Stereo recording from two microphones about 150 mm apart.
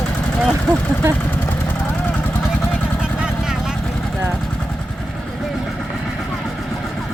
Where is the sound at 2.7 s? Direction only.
5° right (ahead or behind).